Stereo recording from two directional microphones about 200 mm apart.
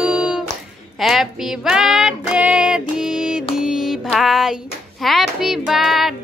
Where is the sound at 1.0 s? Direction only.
Centre (ahead or behind).